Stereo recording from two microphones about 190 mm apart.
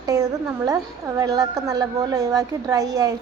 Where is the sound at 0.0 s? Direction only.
20° right (ahead or behind).